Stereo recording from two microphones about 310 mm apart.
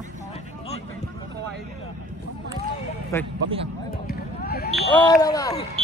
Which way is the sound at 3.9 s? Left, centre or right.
Left.